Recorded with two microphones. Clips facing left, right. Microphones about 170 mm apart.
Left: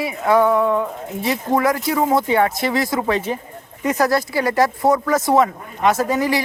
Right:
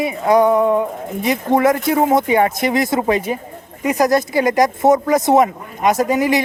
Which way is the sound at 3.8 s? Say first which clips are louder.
Right 3 dB; 15° right (ahead or behind).